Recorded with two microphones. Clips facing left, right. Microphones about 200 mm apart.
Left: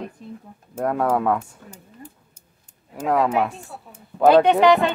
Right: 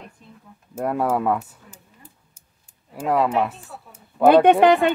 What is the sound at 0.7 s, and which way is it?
Speech, 5° right (ahead or behind).